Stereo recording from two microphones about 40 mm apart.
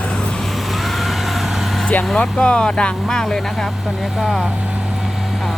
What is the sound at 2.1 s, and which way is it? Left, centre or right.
Speech, left.